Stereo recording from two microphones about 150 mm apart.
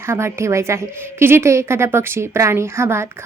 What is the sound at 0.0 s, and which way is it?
A woman's voice, 15° right (ahead or behind).